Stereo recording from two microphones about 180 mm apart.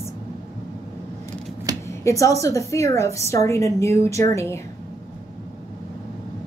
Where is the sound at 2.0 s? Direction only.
15° left (ahead or behind).